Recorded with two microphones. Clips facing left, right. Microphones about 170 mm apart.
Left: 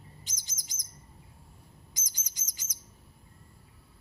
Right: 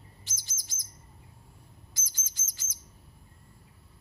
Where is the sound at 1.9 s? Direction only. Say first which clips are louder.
Even; 15° left (ahead or behind).